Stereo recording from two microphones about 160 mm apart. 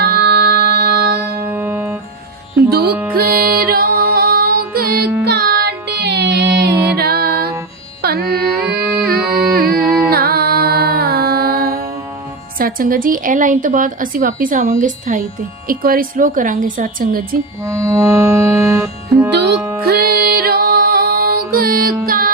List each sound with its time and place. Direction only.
0.1 s music: 90° right
1.5 s music: 10° right (ahead or behind)
2.6 s music: 75° right (ahead or behind)
5.2 s music: 85° right
6.9 s music: 75° right (ahead or behind)
8.8 s music: 10° right (ahead or behind)
9.6 s music: 70° right (ahead or behind)
12.5 s a woman's voice: 60° right (ahead or behind)
17.7 s music: 20° right (ahead or behind)
19.8 s music: 75° right (ahead or behind)